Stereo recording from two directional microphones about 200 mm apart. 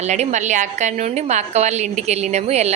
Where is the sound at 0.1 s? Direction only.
35° right (ahead or behind).